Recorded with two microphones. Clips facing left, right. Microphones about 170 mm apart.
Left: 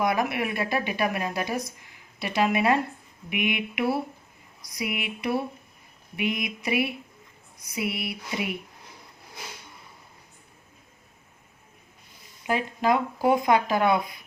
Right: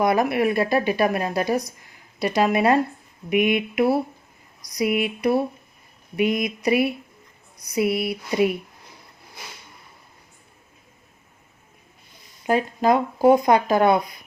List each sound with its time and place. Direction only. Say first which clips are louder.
0.0 s speech: right 6 dB; 35° right (ahead or behind)
12.5 s speech: right 5 dB; 40° right (ahead or behind)